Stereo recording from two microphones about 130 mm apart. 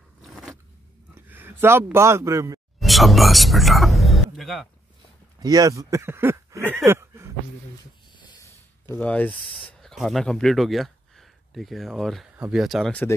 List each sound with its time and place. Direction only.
0.2 s zipper: centre (ahead or behind)
1.1 s speech: 15° right (ahead or behind)
2.8 s speech: centre (ahead or behind)
5.4 s speech: 30° right (ahead or behind)
6.8 s a sound: 20° right (ahead or behind)
8.4 s a sound: 20° left (ahead or behind)
9.7 s speech: 5° left (ahead or behind)